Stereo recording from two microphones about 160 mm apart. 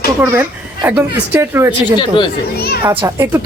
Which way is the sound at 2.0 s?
30° left (ahead or behind).